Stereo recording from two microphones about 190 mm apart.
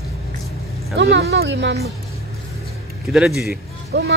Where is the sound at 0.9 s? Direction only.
60° right (ahead or behind).